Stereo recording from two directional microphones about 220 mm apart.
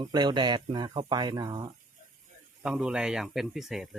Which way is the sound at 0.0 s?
20° right (ahead or behind).